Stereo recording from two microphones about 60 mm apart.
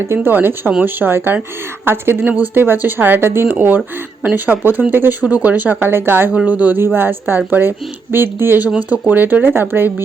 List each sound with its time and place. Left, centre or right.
0.1 s speech: right
6.3 s speech: right
8.6 s speech: right